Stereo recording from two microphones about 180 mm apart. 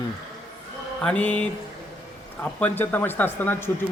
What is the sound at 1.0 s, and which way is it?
Speech, 5° left (ahead or behind).